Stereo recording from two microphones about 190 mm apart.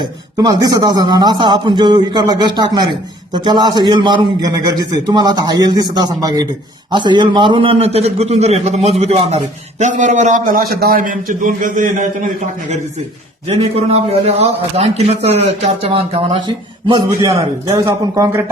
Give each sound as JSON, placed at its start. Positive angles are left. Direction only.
{"t": 0.0, "sound": "a man's voice", "side_deg": -20}
{"t": 13.5, "sound": "a man's voice", "side_deg": -30}
{"t": 16.9, "sound": "a man's voice", "side_deg": -20}